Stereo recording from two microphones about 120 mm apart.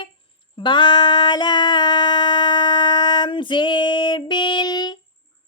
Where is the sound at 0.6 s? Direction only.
40° left (ahead or behind).